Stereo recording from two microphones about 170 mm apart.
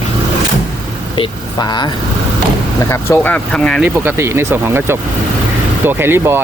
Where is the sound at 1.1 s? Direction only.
25° left (ahead or behind).